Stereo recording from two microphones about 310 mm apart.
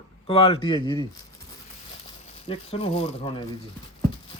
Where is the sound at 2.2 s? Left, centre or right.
Centre.